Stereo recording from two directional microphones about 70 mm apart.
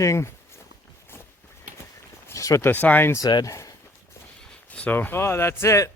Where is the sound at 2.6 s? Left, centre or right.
Left.